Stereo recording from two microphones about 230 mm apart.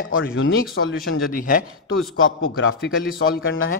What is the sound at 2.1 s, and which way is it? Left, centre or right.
Speech, left.